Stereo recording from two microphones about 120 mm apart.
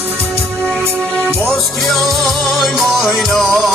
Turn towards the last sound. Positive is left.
turn(degrees=0)  # may be behind; listen again after turning